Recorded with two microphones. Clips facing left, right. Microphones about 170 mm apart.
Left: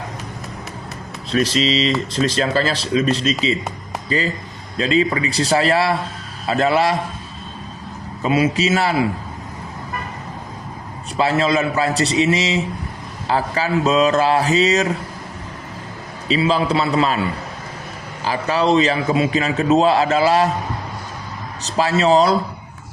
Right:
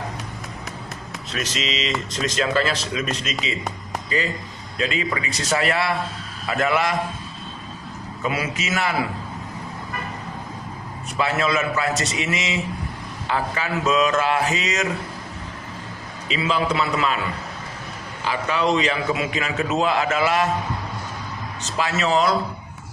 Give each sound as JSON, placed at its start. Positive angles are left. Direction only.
{"t": 1.3, "sound": "a man's voice", "side_deg": 35}
{"t": 4.8, "sound": "a man's voice", "side_deg": 35}
{"t": 8.2, "sound": "a man's voice", "side_deg": 25}
{"t": 11.2, "sound": "a man's voice", "side_deg": 30}
{"t": 16.3, "sound": "a man's voice", "side_deg": 30}
{"t": 18.3, "sound": "a man's voice", "side_deg": 35}
{"t": 21.8, "sound": "a man's voice", "side_deg": 35}